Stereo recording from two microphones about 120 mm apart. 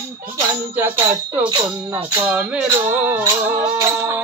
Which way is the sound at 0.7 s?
15° right (ahead or behind).